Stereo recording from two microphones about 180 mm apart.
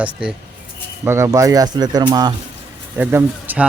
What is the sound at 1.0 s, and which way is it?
Speech, 15° right (ahead or behind).